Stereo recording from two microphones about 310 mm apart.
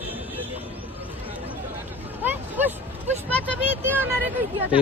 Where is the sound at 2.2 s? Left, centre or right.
Centre.